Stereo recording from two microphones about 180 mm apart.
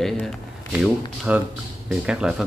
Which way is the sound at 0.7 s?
10° right (ahead or behind).